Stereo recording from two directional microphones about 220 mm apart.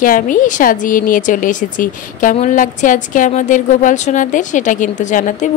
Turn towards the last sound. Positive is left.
turn(degrees=35)  # may be behind; listen again after turning